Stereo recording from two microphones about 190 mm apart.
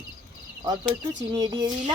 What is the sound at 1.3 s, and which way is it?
Speech, 20° right (ahead or behind).